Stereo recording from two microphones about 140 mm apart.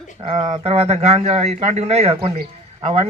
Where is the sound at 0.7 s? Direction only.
50° right (ahead or behind).